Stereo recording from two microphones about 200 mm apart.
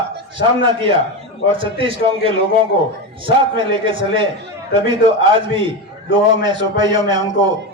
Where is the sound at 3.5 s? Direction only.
25° right (ahead or behind).